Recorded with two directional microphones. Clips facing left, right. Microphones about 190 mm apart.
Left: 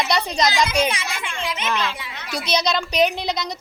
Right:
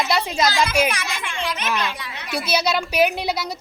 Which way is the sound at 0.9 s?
25° left (ahead or behind).